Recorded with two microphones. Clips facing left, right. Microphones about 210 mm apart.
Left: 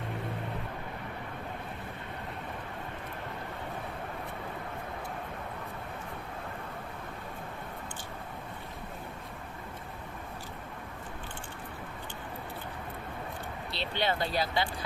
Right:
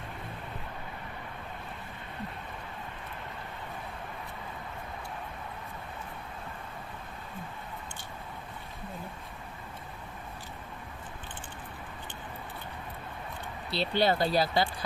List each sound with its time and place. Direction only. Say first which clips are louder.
13.7 s speech: right 5 dB; 35° right (ahead or behind)